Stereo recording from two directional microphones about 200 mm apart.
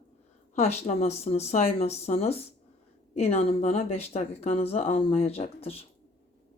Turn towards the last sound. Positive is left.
turn(degrees=30)  # may be behind; listen again after turning